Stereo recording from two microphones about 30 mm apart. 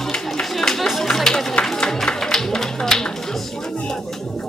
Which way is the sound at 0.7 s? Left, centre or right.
Centre.